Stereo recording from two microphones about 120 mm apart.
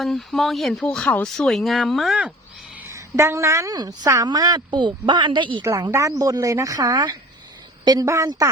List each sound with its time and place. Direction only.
0.0 s speech: centre (ahead or behind)
2.8 s a woman's voice: 25° right (ahead or behind); by 5.6 s 40° right (ahead or behind)
5.6 s speech: 25° right (ahead or behind)